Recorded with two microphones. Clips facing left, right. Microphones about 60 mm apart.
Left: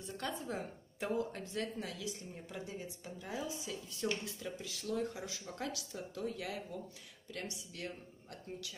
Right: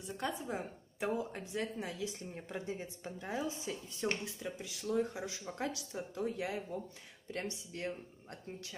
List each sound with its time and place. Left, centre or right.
0.0 s a woman's voice: centre